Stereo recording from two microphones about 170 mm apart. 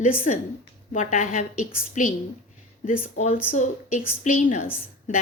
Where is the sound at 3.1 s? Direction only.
40° left (ahead or behind).